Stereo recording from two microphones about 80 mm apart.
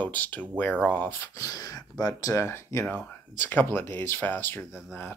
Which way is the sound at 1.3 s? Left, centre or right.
Left.